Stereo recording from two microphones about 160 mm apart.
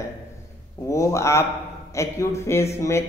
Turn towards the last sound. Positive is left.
turn(degrees=15)  # may be behind; listen again after turning